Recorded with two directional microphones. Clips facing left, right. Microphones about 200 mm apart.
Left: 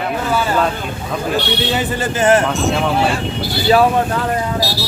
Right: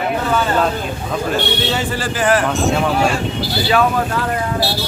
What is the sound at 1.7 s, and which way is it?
Speech, 20° left (ahead or behind).